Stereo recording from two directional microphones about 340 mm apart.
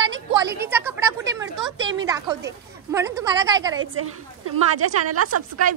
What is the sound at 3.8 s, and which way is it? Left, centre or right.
A woman's voice, right.